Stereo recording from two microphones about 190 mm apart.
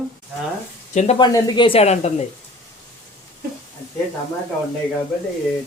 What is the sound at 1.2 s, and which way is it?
Speech, 20° left (ahead or behind).